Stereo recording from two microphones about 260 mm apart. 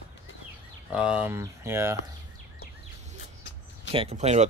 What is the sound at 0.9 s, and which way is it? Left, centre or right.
Speech, centre.